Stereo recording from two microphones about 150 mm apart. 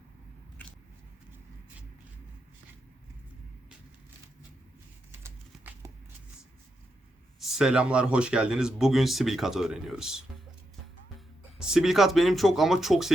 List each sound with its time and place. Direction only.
5.2 s a sound: 15° right (ahead or behind)
7.3 s speech: 5° right (ahead or behind)
11.5 s speech: 5° right (ahead or behind)